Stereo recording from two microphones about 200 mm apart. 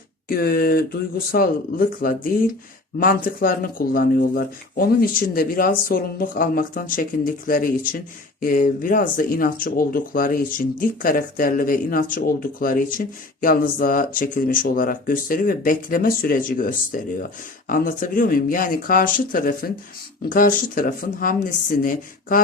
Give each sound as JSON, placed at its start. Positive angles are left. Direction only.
{"t": 0.3, "sound": "speech", "side_deg": 50}